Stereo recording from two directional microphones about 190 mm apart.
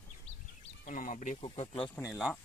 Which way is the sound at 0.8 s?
45° left (ahead or behind).